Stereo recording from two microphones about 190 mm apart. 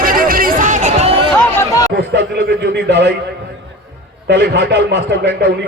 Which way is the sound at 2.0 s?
60° right (ahead or behind).